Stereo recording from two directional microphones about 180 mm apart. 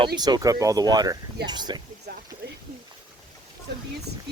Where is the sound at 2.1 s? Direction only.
60° right (ahead or behind).